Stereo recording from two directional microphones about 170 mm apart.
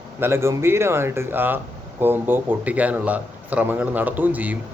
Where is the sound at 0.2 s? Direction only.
15° right (ahead or behind).